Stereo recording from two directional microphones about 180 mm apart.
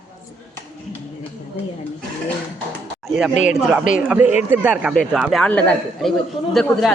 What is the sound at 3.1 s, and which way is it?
Speech, centre (ahead or behind).